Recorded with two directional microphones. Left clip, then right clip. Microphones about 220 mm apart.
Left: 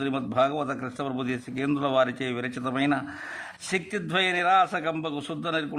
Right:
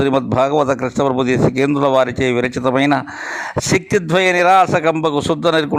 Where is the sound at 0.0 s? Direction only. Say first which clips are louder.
Right 10 dB; 35° right (ahead or behind).